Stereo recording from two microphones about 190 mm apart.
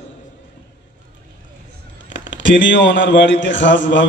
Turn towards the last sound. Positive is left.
turn(degrees=75)  # may be behind; listen again after turning